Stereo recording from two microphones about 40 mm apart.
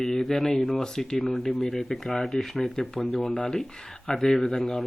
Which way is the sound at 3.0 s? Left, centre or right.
Left.